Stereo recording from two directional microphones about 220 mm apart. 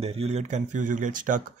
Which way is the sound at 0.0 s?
30° right (ahead or behind).